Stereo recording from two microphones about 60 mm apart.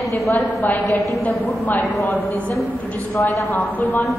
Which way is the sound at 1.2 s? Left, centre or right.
Left.